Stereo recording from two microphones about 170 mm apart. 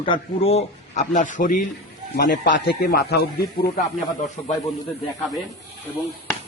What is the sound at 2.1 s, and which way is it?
Speech, 65° left (ahead or behind).